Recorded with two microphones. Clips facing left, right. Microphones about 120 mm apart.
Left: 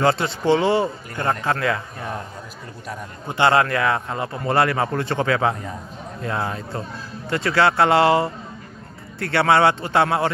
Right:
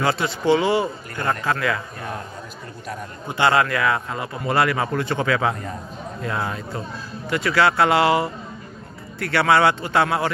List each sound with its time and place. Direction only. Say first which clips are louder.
0.0 s speech: left 2 dB; 30° left (ahead or behind)
3.3 s speech: left 1 dB; 25° left (ahead or behind)